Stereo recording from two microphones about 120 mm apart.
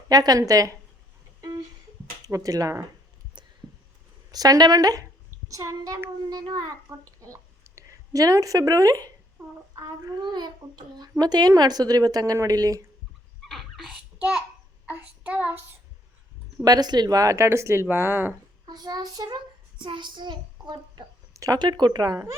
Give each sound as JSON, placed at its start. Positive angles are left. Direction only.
{"t": 0.1, "sound": "speech", "side_deg": -30}
{"t": 2.2, "sound": "speech", "side_deg": -30}
{"t": 4.3, "sound": "a woman's voice", "side_deg": -35}
{"t": 13.4, "sound": "a sound", "side_deg": 0}
{"t": 14.8, "sound": "child singing", "side_deg": -15}
{"t": 16.6, "sound": "speech", "side_deg": -35}
{"t": 18.6, "sound": "a child's voice", "side_deg": -35}